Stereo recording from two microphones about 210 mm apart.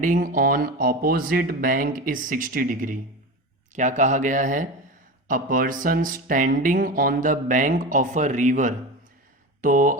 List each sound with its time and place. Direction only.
0.0 s speech: 40° right (ahead or behind)